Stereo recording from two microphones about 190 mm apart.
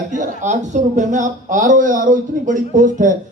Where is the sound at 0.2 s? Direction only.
40° right (ahead or behind).